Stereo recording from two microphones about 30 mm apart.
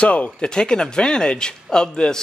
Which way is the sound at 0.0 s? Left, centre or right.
Left.